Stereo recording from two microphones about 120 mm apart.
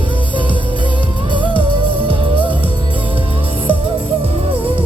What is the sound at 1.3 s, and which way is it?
Music, 45° right (ahead or behind).